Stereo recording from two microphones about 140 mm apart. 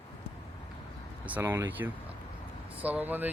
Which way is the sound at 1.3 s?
15° right (ahead or behind).